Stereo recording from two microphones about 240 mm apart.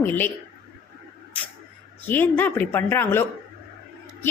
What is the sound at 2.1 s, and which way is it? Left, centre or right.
A woman's voice, centre.